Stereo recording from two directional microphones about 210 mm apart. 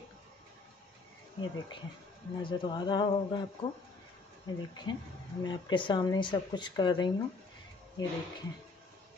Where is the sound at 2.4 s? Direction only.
20° left (ahead or behind).